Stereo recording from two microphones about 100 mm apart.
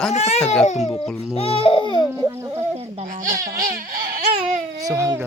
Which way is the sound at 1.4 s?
70° left (ahead or behind).